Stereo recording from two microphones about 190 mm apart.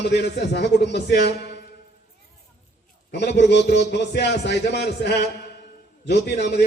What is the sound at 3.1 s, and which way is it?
A man's voice, 65° left (ahead or behind).